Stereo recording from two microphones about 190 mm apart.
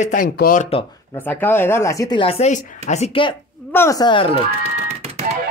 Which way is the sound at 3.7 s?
15° left (ahead or behind).